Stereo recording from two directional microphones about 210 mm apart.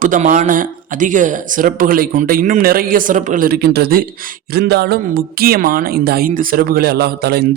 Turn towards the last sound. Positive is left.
turn(degrees=-50)  # may be behind; listen again after turning